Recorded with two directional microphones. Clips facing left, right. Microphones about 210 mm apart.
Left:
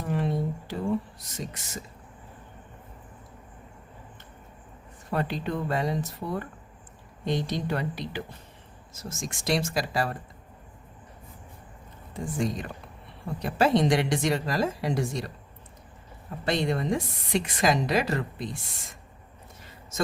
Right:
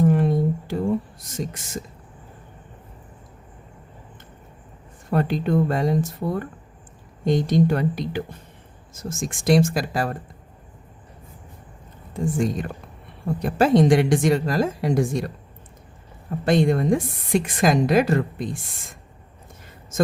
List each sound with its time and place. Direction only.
0.0 s a sound: 50° right (ahead or behind)
1.4 s a woman's voice: 50° right (ahead or behind)
5.1 s a woman's voice: 50° right (ahead or behind)
7.3 s a woman's voice: 45° right (ahead or behind)
12.1 s a woman's voice: 50° right (ahead or behind)
16.5 s a woman's voice: 50° right (ahead or behind)